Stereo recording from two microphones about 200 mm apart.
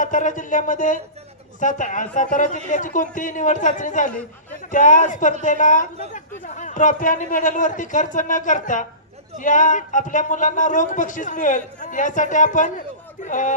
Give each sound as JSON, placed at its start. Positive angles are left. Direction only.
{"t": 0.0, "sound": "a man's voice", "side_deg": 40}